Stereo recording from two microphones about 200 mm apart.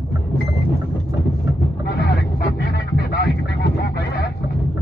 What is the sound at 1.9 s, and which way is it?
Vehicle, 55° left (ahead or behind).